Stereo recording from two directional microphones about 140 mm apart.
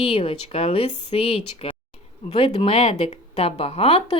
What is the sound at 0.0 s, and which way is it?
A woman's voice, 40° left (ahead or behind).